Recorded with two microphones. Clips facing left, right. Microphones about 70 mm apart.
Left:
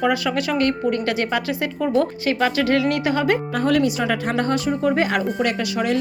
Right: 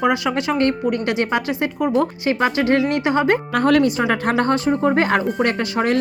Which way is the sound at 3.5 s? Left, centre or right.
Right.